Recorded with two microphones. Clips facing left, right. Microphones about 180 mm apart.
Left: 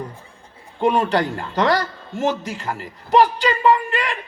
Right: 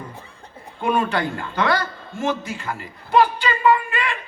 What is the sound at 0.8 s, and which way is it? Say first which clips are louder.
A man's voice: left 3 dB; 35° left (ahead or behind).